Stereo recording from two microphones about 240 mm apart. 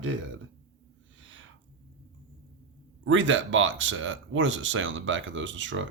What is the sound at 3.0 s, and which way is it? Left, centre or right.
Speech, right.